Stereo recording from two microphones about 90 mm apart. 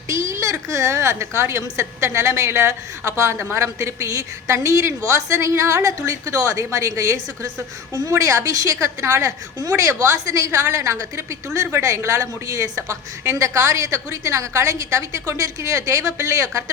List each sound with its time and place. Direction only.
0.1 s a woman's voice: 35° right (ahead or behind)